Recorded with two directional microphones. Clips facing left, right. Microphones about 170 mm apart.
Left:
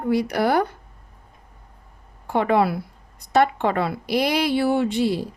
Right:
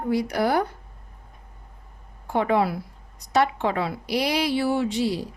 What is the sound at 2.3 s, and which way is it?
Speech, 70° left (ahead or behind).